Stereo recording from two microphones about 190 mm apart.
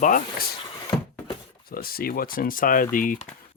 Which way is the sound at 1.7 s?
50° left (ahead or behind).